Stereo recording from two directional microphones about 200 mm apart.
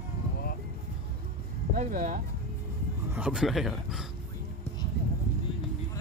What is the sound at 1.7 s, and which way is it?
Speech, 45° right (ahead or behind).